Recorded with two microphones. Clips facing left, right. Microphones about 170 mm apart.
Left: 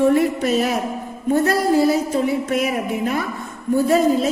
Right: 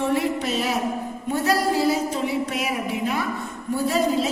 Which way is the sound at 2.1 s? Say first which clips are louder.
Left 5 dB; 50° left (ahead or behind).